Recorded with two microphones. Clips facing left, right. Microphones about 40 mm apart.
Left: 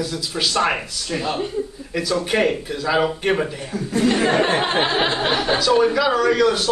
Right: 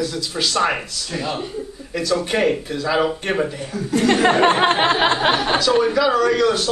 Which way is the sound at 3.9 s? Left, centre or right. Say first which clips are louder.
Right 2 dB; right.